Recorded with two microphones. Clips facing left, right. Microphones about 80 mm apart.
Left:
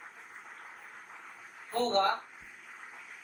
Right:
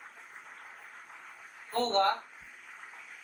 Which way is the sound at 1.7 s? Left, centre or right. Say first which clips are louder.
Even; centre.